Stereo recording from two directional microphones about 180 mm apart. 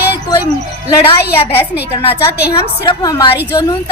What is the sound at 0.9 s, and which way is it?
Speech, 20° left (ahead or behind).